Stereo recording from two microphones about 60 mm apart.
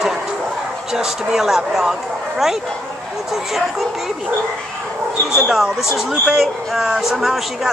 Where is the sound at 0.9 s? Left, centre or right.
Centre.